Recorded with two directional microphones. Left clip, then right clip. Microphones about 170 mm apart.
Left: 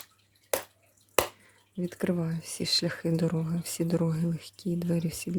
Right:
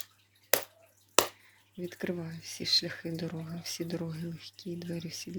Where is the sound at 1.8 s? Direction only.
35° left (ahead or behind).